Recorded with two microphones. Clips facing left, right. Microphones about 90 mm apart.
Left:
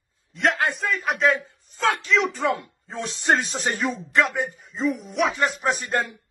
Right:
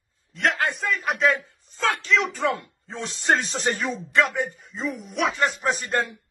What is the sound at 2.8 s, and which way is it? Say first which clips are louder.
Speech: even; 10° left (ahead or behind).